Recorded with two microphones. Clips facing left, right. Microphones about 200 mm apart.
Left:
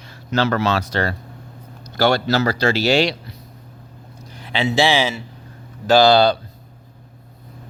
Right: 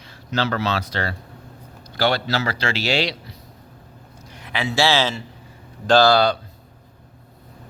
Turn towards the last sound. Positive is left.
turn(degrees=30)  # may be behind; listen again after turning